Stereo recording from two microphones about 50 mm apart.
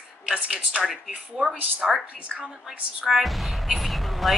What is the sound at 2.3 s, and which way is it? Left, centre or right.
Speech, centre.